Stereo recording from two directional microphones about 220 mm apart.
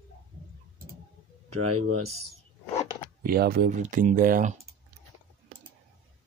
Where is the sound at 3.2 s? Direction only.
40° right (ahead or behind).